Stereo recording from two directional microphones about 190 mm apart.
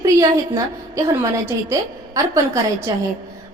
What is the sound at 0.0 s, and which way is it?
A woman's voice, 15° right (ahead or behind).